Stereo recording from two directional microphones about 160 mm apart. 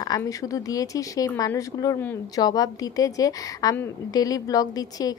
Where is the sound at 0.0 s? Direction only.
20° left (ahead or behind).